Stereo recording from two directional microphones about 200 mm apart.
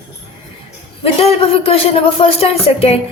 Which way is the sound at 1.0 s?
30° left (ahead or behind).